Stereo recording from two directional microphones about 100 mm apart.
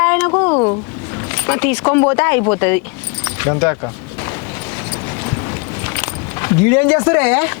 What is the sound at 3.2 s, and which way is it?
Keys jangling, 30° left (ahead or behind).